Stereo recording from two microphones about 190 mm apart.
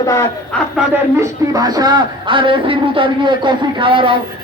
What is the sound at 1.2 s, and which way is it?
A man's voice, 20° right (ahead or behind).